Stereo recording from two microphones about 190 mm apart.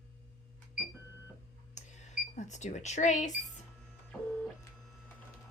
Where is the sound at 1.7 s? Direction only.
40° left (ahead or behind).